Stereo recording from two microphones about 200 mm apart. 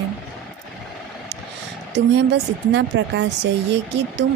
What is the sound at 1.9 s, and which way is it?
Speech, 60° right (ahead or behind).